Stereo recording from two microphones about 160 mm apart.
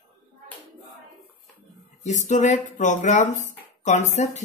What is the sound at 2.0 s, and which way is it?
Speech, 50° left (ahead or behind).